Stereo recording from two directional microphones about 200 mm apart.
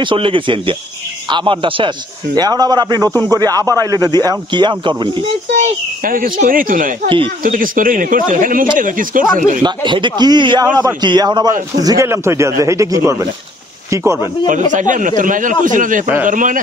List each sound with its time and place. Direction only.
0.0 s a man's voice: 25° right (ahead or behind)
6.0 s speech: 45° right (ahead or behind)
9.6 s a man's voice: 20° right (ahead or behind)
14.7 s speech: 40° right (ahead or behind)